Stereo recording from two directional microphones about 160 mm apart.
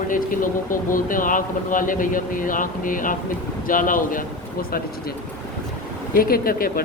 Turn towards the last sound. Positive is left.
turn(degrees=65)  # may be behind; listen again after turning